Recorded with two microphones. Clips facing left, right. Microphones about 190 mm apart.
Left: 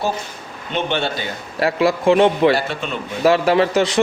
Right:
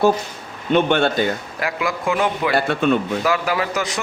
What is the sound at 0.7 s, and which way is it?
Speech, 50° right (ahead or behind).